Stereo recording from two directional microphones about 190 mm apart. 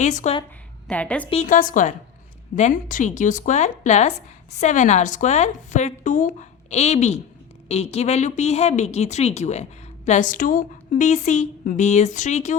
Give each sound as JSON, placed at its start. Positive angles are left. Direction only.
{"t": 0.0, "sound": "a woman's voice", "side_deg": 40}
{"t": 0.9, "sound": "a woman's voice", "side_deg": 5}
{"t": 1.3, "sound": "a woman's voice", "side_deg": 40}